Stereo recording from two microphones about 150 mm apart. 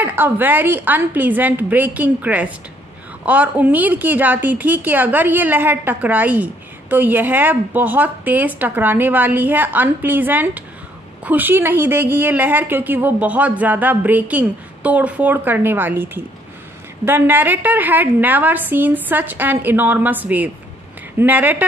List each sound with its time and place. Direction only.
0.0 s a woman's voice: 10° right (ahead or behind)